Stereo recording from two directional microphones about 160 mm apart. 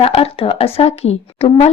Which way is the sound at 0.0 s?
35° left (ahead or behind).